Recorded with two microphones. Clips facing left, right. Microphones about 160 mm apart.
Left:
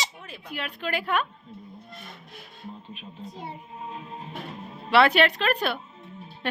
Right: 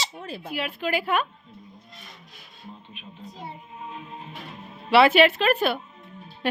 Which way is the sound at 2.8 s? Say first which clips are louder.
Left 3 dB; 35° left (ahead or behind).